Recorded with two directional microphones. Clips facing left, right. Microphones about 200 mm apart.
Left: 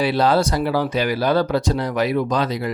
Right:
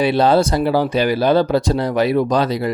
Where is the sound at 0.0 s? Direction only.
25° right (ahead or behind).